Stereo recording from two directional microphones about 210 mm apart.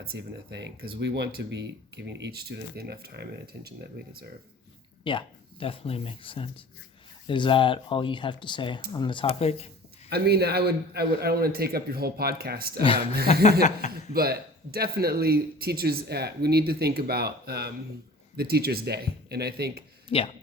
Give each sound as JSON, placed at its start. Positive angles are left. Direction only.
{"t": 0.0, "sound": "speech", "side_deg": -50}
{"t": 5.0, "sound": "speech", "side_deg": 25}
{"t": 10.1, "sound": "speech", "side_deg": -50}
{"t": 13.6, "sound": "speech", "side_deg": 35}
{"t": 14.1, "sound": "speech", "side_deg": -45}
{"t": 20.1, "sound": "speech", "side_deg": 25}